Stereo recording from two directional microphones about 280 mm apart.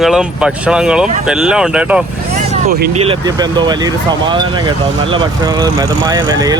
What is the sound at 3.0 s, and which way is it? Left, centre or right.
Speech, centre.